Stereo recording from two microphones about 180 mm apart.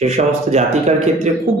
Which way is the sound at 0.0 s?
35° right (ahead or behind).